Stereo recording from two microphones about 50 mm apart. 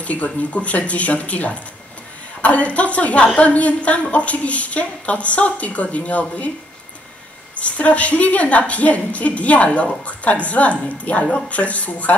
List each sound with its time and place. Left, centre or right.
0.0 s a woman's voice: left
7.5 s a woman's voice: left